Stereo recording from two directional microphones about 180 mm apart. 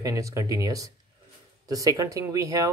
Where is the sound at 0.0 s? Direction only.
15° right (ahead or behind).